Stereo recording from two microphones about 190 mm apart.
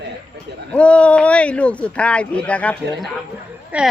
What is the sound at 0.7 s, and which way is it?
Speech, 5° left (ahead or behind).